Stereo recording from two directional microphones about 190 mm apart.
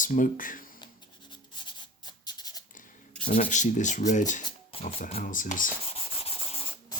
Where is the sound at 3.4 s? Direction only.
40° left (ahead or behind).